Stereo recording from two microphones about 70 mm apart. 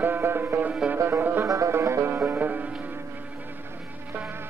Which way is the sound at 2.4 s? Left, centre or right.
Right.